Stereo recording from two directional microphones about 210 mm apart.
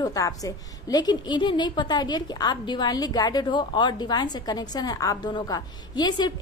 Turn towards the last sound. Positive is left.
turn(degrees=20)  # may be behind; listen again after turning